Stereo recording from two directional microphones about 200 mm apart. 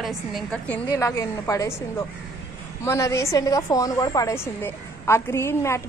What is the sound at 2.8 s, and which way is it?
A woman's voice, 15° left (ahead or behind).